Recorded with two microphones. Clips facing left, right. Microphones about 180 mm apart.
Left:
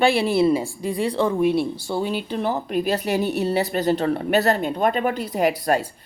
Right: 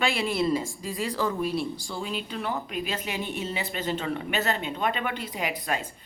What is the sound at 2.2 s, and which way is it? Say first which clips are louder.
A woman's voice: left 7 dB; 35° left (ahead or behind).